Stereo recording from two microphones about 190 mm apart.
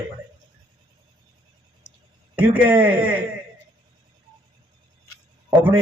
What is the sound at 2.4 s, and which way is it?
Speech, 10° right (ahead or behind).